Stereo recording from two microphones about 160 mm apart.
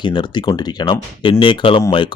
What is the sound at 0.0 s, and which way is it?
Speech, 30° left (ahead or behind).